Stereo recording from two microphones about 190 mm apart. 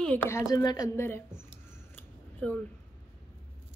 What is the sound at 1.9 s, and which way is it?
Scissors, 10° left (ahead or behind).